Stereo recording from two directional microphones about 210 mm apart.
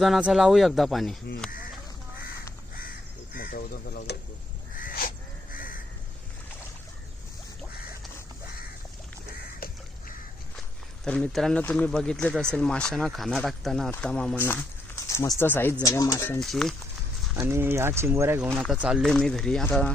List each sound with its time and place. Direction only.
0.0 s speech: centre (ahead or behind)
1.4 s duck: 5° left (ahead or behind)
3.3 s speech: 45° left (ahead or behind)
4.8 s a sound: 40° left (ahead or behind)
11.0 s speech: 5° left (ahead or behind)
17.3 s speech: 10° right (ahead or behind)
18.5 s speech: centre (ahead or behind)